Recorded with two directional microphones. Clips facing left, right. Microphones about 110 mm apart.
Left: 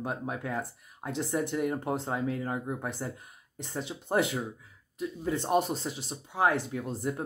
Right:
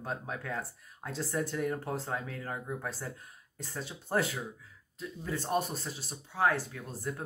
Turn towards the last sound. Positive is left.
turn(degrees=20)  # may be behind; listen again after turning